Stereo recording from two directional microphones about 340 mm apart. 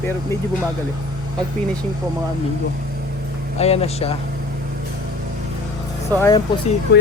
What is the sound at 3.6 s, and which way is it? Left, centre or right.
Speech, centre.